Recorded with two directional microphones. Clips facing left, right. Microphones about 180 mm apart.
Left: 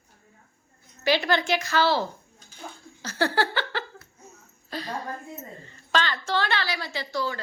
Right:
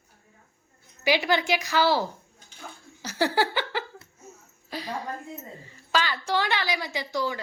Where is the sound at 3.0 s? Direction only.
15° right (ahead or behind).